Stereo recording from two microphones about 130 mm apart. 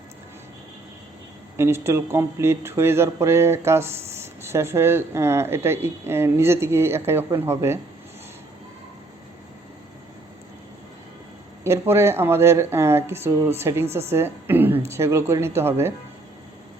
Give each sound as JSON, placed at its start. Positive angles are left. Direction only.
{"t": 1.5, "sound": "speech", "side_deg": -20}
{"t": 11.6, "sound": "a woman's voice", "side_deg": -20}